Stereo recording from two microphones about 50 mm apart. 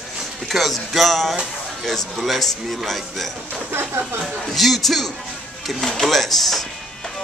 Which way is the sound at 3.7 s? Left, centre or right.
Right.